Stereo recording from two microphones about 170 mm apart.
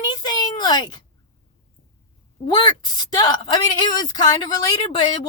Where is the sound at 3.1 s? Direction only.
25° left (ahead or behind).